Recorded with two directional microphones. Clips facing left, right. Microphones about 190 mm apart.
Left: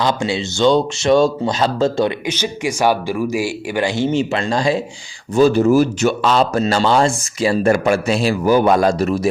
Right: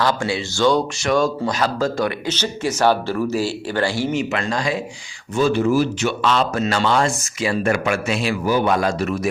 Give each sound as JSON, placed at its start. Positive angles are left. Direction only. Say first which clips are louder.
{"t": 0.0, "sound": "speech", "louder": "left 2 dB", "side_deg": 20}
{"t": 2.2, "sound": "speech", "louder": "left 2 dB", "side_deg": 10}
{"t": 5.3, "sound": "speech", "louder": "left 5 dB", "side_deg": 40}